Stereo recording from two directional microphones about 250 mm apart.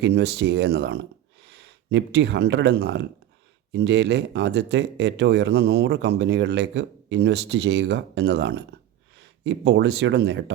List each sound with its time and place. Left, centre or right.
0.0 s speech: right